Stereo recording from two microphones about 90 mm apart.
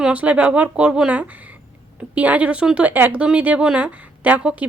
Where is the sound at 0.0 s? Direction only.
15° right (ahead or behind).